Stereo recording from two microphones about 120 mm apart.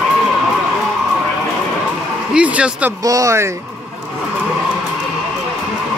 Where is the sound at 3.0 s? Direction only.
30° right (ahead or behind).